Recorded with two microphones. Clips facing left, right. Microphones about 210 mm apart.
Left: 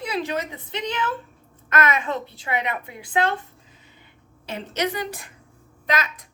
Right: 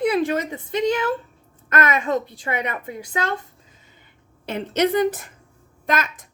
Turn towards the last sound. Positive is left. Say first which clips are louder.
# right 2 dB
turn(degrees=-50)  # may be behind; listen again after turning